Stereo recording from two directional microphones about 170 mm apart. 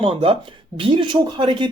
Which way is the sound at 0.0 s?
35° right (ahead or behind).